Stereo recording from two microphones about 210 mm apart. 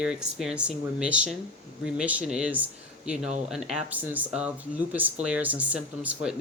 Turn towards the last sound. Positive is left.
turn(degrees=-5)  # may be behind; listen again after turning